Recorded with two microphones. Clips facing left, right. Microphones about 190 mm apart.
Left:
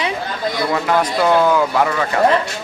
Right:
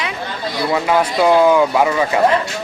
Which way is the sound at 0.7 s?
5° right (ahead or behind).